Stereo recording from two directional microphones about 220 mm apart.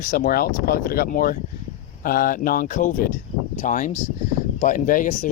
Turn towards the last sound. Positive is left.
turn(degrees=35)  # may be behind; listen again after turning